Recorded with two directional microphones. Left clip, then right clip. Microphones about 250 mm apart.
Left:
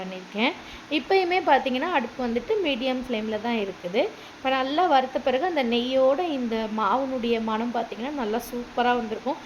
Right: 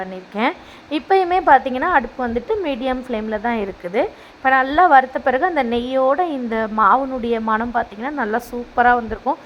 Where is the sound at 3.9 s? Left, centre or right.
Centre.